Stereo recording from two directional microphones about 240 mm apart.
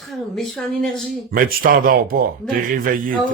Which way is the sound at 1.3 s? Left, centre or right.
Right.